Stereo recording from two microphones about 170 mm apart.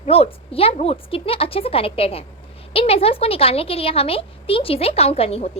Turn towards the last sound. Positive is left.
turn(degrees=35)  # may be behind; listen again after turning